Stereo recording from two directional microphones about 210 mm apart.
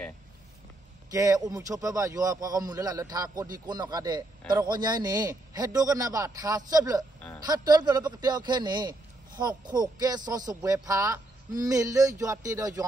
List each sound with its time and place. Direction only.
1.1 s a man's voice: 15° right (ahead or behind)